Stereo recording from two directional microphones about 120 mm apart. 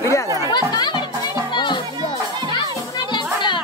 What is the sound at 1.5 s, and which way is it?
Children playing, 40° left (ahead or behind).